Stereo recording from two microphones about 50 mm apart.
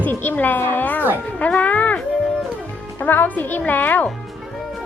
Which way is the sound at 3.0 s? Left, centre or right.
Left.